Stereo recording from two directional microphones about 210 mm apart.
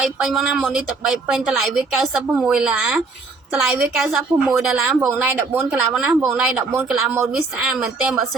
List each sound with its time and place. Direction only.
0.0 s a woman's voice: centre (ahead or behind)